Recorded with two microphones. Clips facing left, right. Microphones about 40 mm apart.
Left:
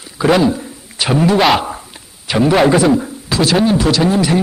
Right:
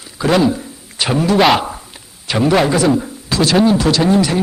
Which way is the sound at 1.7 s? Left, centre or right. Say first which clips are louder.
Left 3 dB; centre.